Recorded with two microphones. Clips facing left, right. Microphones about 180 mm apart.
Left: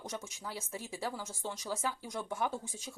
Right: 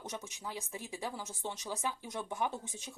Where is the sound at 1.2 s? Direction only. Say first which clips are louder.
Left 1 dB; centre (ahead or behind).